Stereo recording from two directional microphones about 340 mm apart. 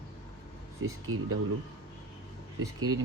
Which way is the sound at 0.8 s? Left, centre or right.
Right.